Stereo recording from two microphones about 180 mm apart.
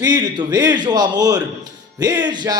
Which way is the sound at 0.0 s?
20° right (ahead or behind).